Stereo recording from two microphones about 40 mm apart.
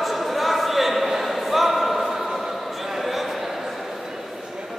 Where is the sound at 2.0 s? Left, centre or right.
Centre.